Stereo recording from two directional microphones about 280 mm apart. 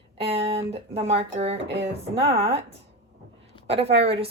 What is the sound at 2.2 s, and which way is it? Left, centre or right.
Speech, right.